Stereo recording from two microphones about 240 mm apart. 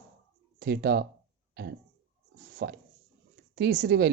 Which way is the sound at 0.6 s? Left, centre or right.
Right.